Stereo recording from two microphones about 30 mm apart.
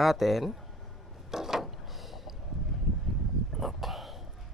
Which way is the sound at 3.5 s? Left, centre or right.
Centre.